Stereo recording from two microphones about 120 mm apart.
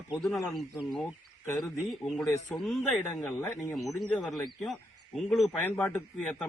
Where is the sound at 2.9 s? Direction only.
20° left (ahead or behind).